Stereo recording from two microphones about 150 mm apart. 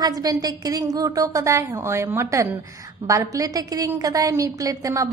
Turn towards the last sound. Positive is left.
turn(degrees=-20)  # may be behind; listen again after turning